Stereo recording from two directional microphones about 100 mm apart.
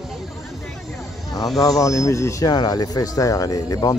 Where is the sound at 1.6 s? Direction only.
35° left (ahead or behind).